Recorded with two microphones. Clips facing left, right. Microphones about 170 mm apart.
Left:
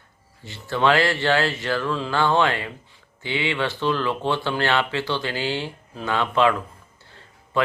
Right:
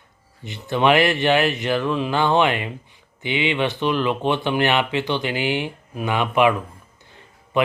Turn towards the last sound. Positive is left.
turn(degrees=-20)  # may be behind; listen again after turning